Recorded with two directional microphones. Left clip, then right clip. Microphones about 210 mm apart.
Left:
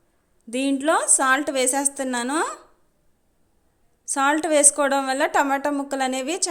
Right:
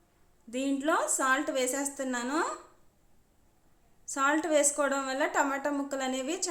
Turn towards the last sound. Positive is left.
turn(degrees=40)  # may be behind; listen again after turning